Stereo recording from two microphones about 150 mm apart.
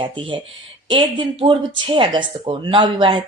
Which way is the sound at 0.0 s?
35° right (ahead or behind).